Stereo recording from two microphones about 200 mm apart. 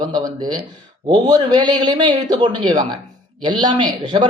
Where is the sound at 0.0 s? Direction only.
20° right (ahead or behind).